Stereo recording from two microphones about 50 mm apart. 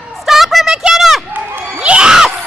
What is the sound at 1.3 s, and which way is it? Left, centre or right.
Crowd, right.